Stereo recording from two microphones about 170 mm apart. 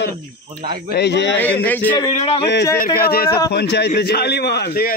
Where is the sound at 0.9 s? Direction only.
85° left.